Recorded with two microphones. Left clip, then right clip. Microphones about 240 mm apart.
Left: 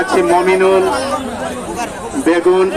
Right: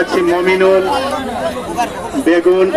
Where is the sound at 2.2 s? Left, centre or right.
Left.